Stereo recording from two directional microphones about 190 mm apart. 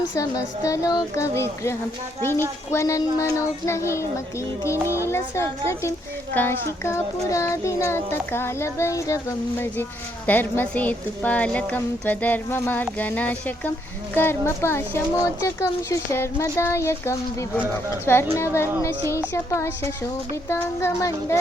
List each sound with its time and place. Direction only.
0.2 s a woman's voice: 15° left (ahead or behind)
2.7 s a woman's voice: 15° left (ahead or behind)
5.0 s a woman's voice: 15° left (ahead or behind)